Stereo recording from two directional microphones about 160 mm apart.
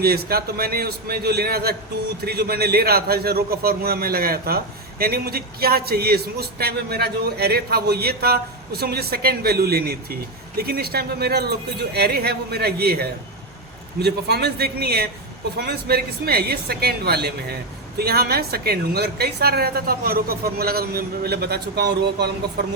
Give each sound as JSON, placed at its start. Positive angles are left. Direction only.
{"t": 0.0, "sound": "a man's voice", "side_deg": -75}